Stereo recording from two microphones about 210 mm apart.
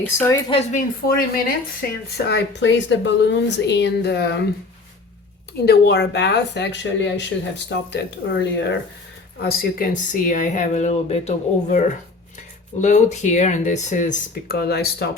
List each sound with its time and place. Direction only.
0.0 s a woman's voice: 10° left (ahead or behind)
0.5 s speech: 30° left (ahead or behind)
2.1 s speech: 50° left (ahead or behind)
5.6 s speech: 50° left (ahead or behind); by 11.8 s 30° left (ahead or behind)
12.8 s speech: 35° left (ahead or behind); by 15.1 s 50° left (ahead or behind)